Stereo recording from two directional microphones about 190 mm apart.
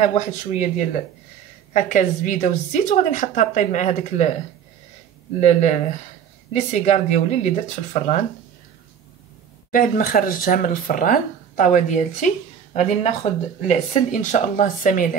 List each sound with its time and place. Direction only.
0.0 s a woman's voice: 35° left (ahead or behind)
5.4 s a woman's voice: 40° left (ahead or behind)
9.7 s a woman's voice: 50° left (ahead or behind)
14.6 s speech: 45° left (ahead or behind)